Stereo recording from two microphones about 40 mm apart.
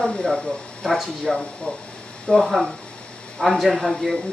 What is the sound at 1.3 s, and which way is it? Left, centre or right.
Speech, left.